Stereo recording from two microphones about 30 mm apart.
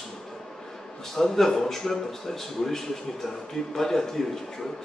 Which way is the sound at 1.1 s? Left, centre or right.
Centre.